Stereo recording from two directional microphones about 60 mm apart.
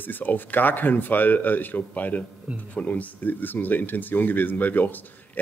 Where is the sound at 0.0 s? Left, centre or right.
Left.